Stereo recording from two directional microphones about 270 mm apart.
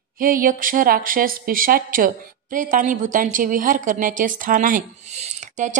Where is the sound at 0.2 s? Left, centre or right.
Right.